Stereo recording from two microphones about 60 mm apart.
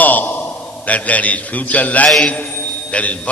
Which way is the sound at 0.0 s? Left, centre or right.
Left.